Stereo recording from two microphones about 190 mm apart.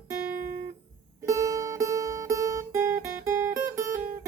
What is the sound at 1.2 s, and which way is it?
Music, 15° right (ahead or behind).